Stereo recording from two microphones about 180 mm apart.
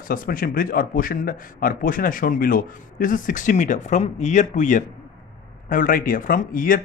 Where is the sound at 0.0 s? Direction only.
50° left (ahead or behind).